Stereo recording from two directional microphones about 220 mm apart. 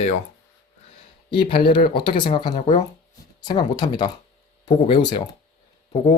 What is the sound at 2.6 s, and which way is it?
Speech, 30° left (ahead or behind).